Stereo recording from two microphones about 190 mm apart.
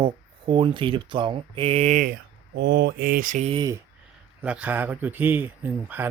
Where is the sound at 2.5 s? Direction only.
60° right (ahead or behind); by 3.5 s 45° right (ahead or behind).